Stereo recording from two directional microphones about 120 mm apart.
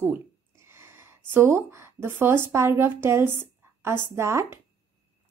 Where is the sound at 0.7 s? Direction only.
20° right (ahead or behind).